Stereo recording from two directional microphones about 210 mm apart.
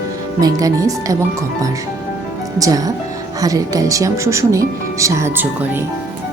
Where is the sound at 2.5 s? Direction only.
15° right (ahead or behind).